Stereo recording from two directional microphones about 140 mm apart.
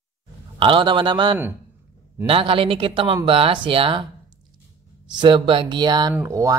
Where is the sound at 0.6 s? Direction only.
35° right (ahead or behind).